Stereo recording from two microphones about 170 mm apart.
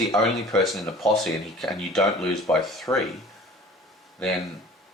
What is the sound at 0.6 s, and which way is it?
Speech, centre (ahead or behind).